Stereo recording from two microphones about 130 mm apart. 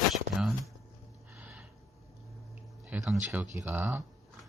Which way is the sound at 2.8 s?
5° right (ahead or behind).